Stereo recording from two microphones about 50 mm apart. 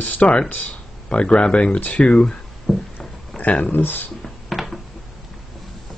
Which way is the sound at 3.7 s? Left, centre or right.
Left.